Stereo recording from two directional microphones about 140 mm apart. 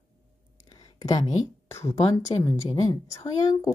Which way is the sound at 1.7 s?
20° left (ahead or behind).